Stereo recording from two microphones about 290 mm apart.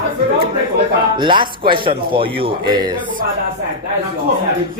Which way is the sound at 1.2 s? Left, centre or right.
Centre.